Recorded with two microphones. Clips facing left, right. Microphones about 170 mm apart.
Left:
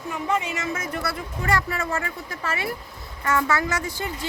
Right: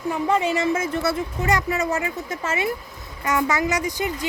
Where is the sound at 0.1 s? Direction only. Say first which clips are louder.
Right 5 dB; 35° right (ahead or behind).